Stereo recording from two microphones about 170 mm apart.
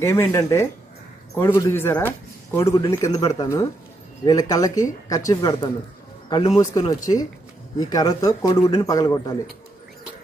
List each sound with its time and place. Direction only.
0.0 s a man's voice: 15° left (ahead or behind)